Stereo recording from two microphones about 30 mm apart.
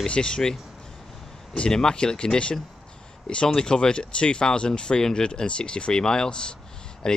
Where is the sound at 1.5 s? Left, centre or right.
Left.